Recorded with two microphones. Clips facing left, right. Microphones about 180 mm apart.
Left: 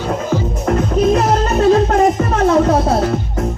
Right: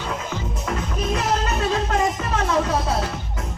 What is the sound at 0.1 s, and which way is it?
Music, 45° left (ahead or behind).